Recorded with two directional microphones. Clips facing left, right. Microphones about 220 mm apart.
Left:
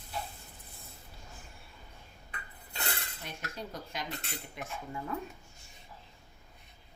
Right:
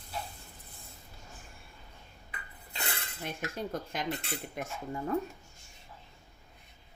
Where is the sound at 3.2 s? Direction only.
50° right (ahead or behind).